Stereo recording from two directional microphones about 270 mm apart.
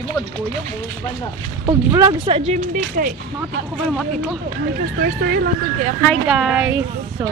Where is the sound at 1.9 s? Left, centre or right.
Centre.